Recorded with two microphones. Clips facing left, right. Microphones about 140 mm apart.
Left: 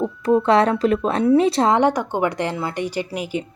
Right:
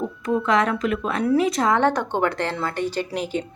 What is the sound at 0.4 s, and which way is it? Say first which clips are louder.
A woman's voice: left 2 dB; 35° left (ahead or behind).